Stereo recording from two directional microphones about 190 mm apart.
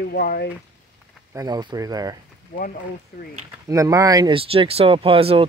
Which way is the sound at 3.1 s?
60° left (ahead or behind).